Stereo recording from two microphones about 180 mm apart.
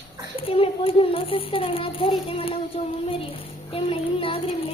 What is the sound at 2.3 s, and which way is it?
A woman's voice, 30° left (ahead or behind).